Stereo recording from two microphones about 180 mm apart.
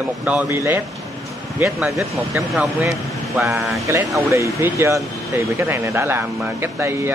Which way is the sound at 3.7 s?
15° right (ahead or behind).